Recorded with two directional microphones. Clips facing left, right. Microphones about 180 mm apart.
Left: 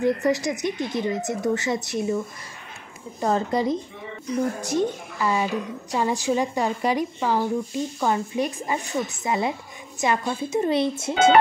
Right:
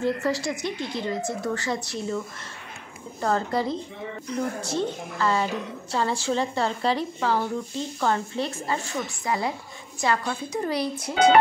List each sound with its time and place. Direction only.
0.0 s a woman's voice: 20° left (ahead or behind)